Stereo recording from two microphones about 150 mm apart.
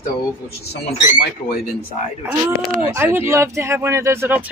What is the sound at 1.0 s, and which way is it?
Speech, 55° left (ahead or behind).